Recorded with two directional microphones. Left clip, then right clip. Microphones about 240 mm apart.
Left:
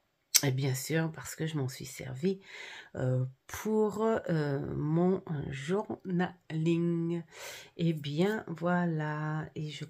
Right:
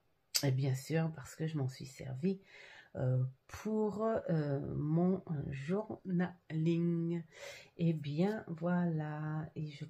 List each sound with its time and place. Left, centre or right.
0.3 s speech: left